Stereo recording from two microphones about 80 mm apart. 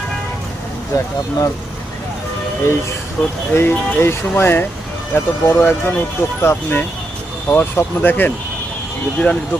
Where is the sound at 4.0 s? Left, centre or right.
Left.